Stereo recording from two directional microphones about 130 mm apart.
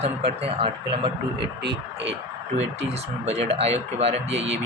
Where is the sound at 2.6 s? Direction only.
55° right (ahead or behind).